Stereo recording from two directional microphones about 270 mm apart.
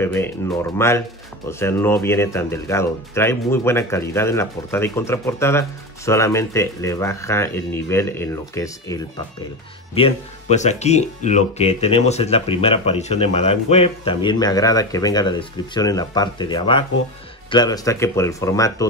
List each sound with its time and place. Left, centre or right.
0.0 s speech: centre
9.9 s speech: left